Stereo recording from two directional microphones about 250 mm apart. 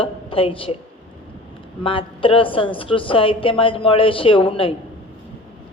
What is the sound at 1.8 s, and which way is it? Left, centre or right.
Speech, left.